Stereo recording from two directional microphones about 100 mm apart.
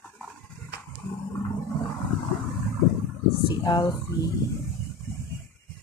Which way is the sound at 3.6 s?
45° left (ahead or behind).